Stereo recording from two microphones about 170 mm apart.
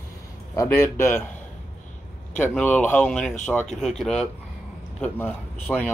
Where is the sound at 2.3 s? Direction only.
10° left (ahead or behind).